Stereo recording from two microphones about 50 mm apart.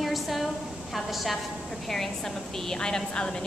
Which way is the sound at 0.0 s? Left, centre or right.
Centre.